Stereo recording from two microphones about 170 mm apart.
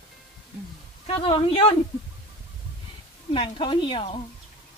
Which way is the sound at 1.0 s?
30° left (ahead or behind).